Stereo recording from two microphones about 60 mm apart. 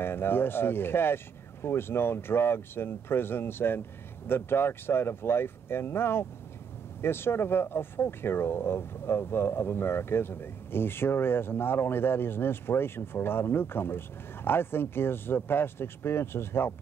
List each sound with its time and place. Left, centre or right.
0.0 s speech: left